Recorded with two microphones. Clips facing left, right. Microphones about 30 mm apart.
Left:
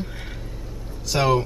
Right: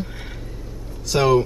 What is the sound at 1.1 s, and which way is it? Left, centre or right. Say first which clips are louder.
Speech: right 3 dB; centre.